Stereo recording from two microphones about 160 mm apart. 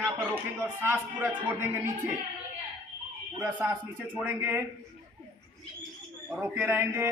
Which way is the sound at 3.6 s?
10° right (ahead or behind).